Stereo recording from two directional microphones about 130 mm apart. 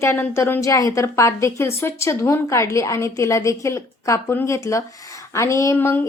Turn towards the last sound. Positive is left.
turn(degrees=20)  # may be behind; listen again after turning